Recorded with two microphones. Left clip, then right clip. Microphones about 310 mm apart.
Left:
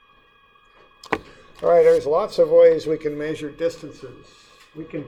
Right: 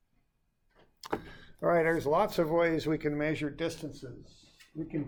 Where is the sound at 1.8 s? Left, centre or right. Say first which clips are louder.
Left 12 dB; right.